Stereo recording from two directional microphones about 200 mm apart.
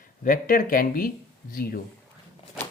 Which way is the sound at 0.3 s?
45° left (ahead or behind).